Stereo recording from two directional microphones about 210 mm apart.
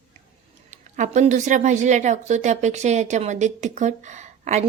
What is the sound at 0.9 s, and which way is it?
A woman's voice, 35° right (ahead or behind).